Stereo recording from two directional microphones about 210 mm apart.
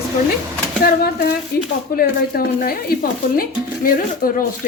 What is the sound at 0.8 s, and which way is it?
Speech, 45° left (ahead or behind).